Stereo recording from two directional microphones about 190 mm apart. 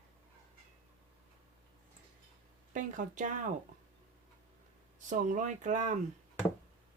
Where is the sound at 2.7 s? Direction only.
40° right (ahead or behind).